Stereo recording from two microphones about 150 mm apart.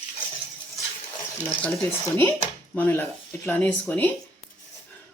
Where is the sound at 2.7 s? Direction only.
15° left (ahead or behind).